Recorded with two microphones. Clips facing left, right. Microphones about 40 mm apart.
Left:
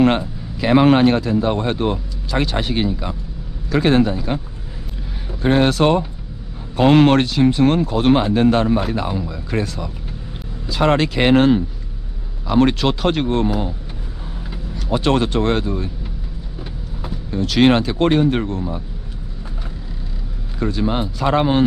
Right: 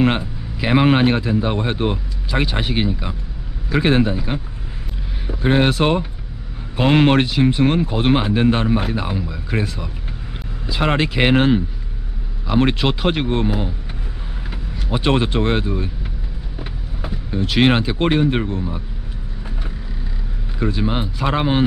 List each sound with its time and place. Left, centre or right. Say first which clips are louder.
0.0 s a man's voice: left 2 dB; centre
5.4 s a man's voice: left 1 dB; centre
17.0 s a man's voice: even; centre
20.5 s a man's voice: left 1 dB; centre